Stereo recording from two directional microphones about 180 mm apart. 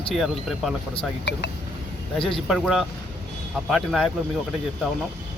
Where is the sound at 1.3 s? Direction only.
70° left (ahead or behind).